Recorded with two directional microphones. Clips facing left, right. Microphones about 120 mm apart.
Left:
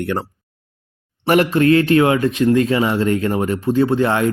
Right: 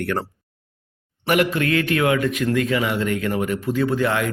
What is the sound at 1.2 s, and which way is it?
Speech, 35° left (ahead or behind).